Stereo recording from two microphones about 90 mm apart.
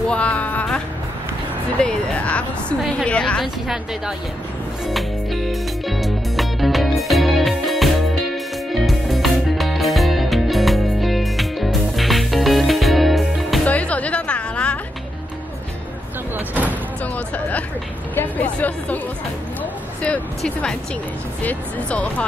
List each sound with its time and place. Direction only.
0.1 s music: 15° left (ahead or behind)
1.8 s speech: 10° left (ahead or behind)
3.6 s a woman's voice: 5° right (ahead or behind)
4.8 s music: centre (ahead or behind)
13.7 s music: 15° left (ahead or behind)
16.3 s slam: 20° right (ahead or behind)
17.0 s music: 15° left (ahead or behind)
18.1 s speech: 20° left (ahead or behind)
20.0 s speech: 10° left (ahead or behind)